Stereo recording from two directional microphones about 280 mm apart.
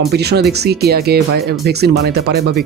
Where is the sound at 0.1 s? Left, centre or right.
Right.